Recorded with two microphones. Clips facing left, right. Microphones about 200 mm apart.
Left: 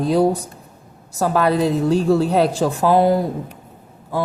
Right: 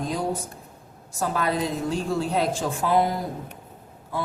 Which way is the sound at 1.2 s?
70° left (ahead or behind).